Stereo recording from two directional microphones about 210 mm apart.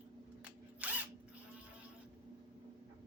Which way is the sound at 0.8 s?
5° right (ahead or behind).